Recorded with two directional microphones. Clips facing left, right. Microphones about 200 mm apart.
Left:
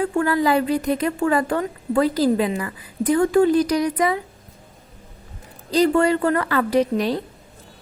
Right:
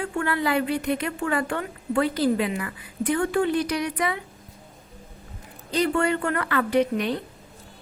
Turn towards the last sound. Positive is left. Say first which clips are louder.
# left 3 dB
turn(degrees=35)  # may be behind; listen again after turning